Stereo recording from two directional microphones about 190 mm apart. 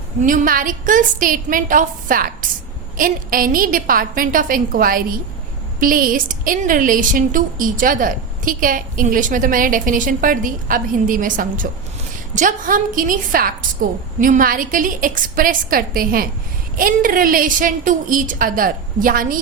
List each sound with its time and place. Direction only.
0.2 s a woman's voice: 40° right (ahead or behind)